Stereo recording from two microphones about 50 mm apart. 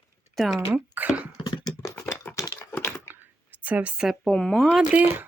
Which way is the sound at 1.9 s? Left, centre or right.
Left.